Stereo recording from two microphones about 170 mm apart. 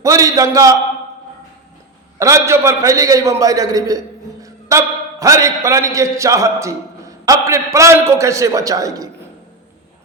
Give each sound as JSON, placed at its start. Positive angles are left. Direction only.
{"t": 0.0, "sound": "a man's voice", "side_deg": -20}
{"t": 2.1, "sound": "a man's voice", "side_deg": -15}